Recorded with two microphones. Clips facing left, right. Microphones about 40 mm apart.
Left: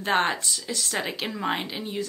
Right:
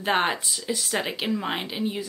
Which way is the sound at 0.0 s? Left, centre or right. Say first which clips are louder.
Even; centre.